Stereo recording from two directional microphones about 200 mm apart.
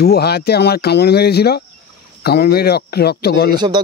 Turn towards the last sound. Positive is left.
turn(degrees=50)  # may be behind; listen again after turning